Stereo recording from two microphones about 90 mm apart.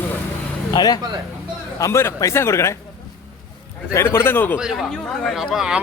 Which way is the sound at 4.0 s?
30° left (ahead or behind).